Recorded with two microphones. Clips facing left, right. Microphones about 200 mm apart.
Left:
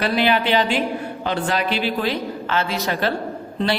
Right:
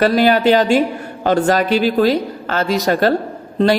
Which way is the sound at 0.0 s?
45° right (ahead or behind).